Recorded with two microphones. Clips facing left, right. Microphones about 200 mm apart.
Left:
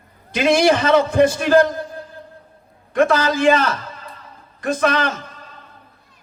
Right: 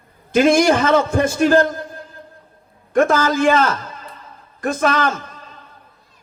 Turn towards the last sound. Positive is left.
turn(degrees=-45)  # may be behind; listen again after turning